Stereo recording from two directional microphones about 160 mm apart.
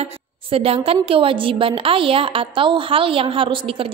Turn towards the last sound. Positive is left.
turn(degrees=-35)  # may be behind; listen again after turning